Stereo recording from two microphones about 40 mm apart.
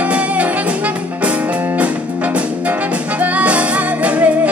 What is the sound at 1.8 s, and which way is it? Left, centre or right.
Music, right.